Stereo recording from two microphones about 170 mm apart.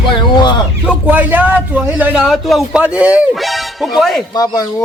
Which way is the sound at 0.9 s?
10° right (ahead or behind).